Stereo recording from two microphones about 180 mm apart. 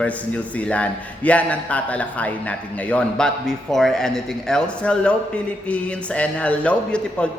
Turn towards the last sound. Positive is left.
turn(degrees=5)  # may be behind; listen again after turning